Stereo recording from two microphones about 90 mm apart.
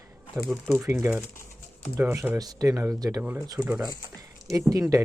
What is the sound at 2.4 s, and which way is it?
Speech, 40° right (ahead or behind).